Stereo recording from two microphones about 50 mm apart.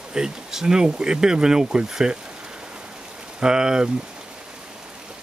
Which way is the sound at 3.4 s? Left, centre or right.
Centre.